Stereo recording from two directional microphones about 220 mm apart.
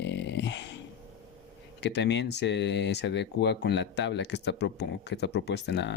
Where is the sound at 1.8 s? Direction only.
50° left (ahead or behind).